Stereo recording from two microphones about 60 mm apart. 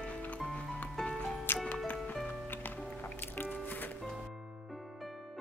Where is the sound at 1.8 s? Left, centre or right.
Left.